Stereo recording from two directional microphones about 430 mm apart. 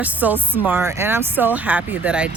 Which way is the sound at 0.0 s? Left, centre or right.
Centre.